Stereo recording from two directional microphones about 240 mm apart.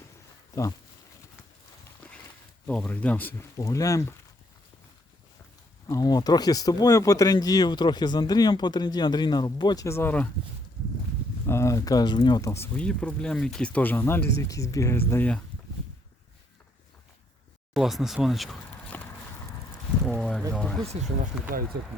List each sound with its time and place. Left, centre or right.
2.6 s speech: centre
5.9 s speech: centre
11.4 s speech: centre
17.7 s speech: centre
21.7 s speech: right